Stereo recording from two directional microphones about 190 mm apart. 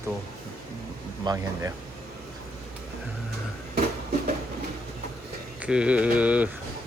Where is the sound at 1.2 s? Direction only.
20° right (ahead or behind).